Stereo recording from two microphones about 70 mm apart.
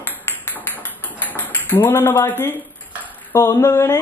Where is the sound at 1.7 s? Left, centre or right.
Left.